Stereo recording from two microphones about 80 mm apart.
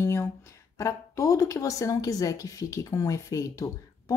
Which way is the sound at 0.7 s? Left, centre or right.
Left.